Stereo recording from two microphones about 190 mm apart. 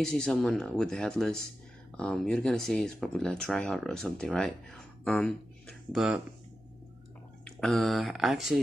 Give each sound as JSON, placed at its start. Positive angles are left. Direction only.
{"t": 0.0, "sound": "speech", "side_deg": 5}
{"t": 7.4, "sound": "speech", "side_deg": 5}